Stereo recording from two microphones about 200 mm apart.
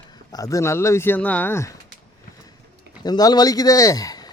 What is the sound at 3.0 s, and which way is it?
Speech, 20° left (ahead or behind).